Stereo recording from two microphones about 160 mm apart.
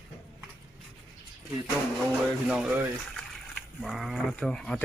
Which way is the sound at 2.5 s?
5° right (ahead or behind).